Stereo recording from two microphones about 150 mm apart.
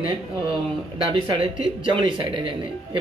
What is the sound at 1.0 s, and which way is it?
Speech, 35° right (ahead or behind).